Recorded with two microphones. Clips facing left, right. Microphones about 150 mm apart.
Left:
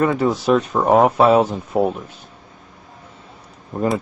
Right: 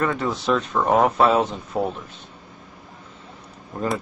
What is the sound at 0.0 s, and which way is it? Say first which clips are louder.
Speech: left 6 dB; 10° left (ahead or behind).